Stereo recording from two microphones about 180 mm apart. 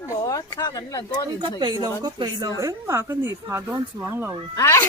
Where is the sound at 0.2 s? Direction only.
20° left (ahead or behind).